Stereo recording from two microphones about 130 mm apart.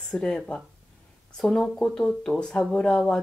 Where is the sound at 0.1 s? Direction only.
5° left (ahead or behind).